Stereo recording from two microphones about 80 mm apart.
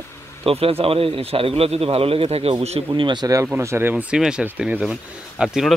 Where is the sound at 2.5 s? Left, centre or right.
Right.